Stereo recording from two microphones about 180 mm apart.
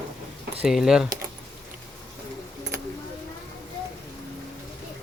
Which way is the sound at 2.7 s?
15° right (ahead or behind).